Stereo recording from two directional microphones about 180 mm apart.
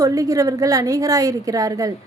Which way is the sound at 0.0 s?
20° right (ahead or behind).